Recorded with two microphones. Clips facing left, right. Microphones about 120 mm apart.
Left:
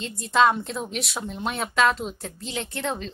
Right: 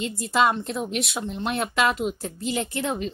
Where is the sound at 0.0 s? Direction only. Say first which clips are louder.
Left 1 dB; centre (ahead or behind).